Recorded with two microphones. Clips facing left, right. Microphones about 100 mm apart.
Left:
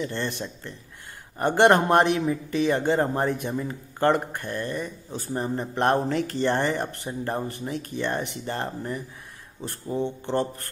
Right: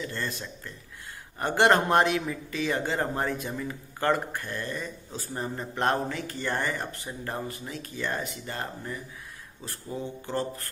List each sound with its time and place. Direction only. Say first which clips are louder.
0.0 s speech: left 5 dB; 25° left (ahead or behind)
1.4 s speech: left 4 dB; 20° left (ahead or behind)